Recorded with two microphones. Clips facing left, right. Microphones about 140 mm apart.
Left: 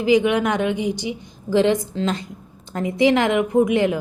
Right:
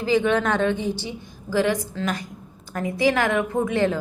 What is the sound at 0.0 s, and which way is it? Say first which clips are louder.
A woman's voice: left 3 dB; 15° left (ahead or behind).